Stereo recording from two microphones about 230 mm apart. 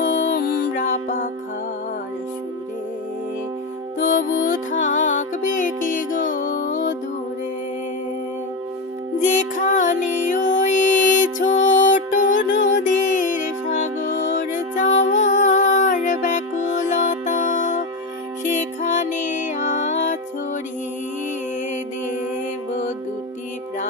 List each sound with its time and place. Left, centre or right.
0.0 s music: left
3.9 s music: left
9.3 s music: left